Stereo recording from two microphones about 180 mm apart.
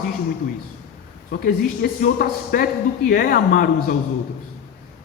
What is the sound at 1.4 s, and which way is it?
A man's voice, 55° left (ahead or behind).